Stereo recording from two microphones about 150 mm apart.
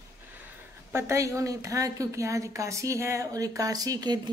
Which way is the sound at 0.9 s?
20° right (ahead or behind).